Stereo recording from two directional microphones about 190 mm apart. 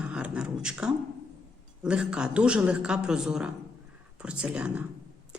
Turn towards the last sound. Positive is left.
turn(degrees=-5)  # may be behind; listen again after turning